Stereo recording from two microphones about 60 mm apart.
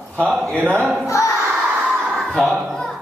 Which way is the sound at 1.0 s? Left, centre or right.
Left.